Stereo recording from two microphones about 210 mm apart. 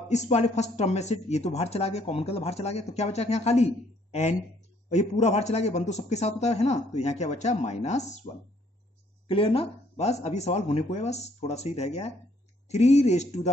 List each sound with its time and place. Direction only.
0.1 s speech: 30° left (ahead or behind)
9.3 s speech: 25° left (ahead or behind)